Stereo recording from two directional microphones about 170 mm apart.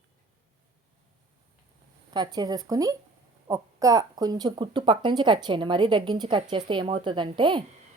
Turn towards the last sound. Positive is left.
turn(degrees=-30)  # may be behind; listen again after turning